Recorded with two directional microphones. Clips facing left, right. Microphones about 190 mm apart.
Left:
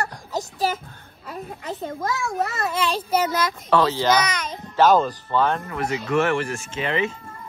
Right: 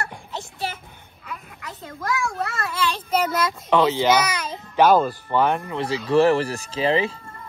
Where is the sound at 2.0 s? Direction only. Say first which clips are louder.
Right 1 dB; 20° left (ahead or behind).